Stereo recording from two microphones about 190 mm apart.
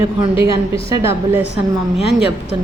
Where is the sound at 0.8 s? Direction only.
15° right (ahead or behind).